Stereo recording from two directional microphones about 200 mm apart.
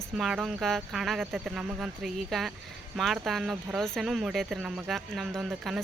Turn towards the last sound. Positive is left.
turn(degrees=0)  # may be behind; listen again after turning